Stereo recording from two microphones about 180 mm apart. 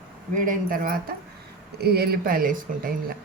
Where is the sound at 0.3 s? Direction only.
50° right (ahead or behind).